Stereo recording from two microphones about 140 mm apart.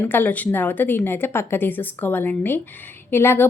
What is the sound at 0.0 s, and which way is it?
Speech, 15° left (ahead or behind).